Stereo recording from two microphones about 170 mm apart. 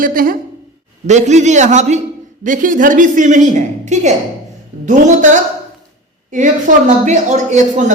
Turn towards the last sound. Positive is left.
turn(degrees=-45)  # may be behind; listen again after turning